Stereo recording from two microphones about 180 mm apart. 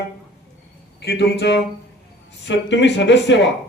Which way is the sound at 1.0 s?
65° left (ahead or behind).